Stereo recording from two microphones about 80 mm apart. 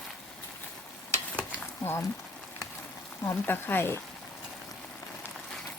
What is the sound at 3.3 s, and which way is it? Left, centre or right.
Speech, left.